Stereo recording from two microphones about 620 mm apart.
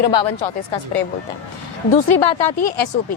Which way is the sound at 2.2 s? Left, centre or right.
Left.